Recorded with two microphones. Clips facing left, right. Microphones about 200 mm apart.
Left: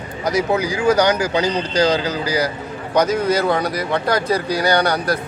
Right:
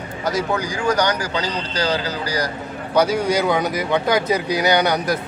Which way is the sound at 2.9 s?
10° right (ahead or behind).